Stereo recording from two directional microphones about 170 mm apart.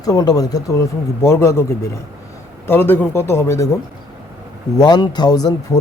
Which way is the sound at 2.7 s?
10° left (ahead or behind).